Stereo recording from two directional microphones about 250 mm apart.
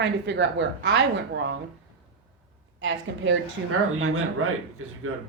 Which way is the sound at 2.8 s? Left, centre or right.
Right.